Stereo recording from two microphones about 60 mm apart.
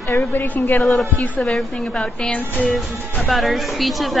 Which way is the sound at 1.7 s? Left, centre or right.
Centre.